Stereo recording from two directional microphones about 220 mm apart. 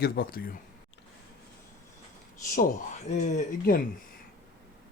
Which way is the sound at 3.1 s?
35° left (ahead or behind).